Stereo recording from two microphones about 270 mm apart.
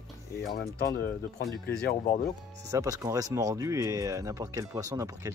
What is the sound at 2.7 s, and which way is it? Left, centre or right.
Speech, centre.